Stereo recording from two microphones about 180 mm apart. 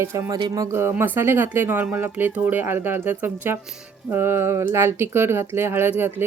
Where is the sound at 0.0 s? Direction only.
15° right (ahead or behind).